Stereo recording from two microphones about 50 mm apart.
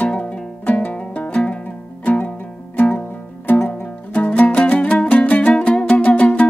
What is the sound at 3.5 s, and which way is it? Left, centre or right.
Music, left.